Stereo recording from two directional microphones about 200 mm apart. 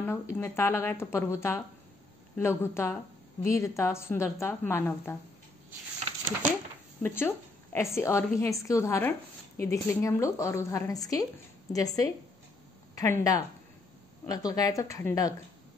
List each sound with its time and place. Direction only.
0.0 s a woman's voice: 15° left (ahead or behind)
7.0 s a woman's voice: 10° left (ahead or behind)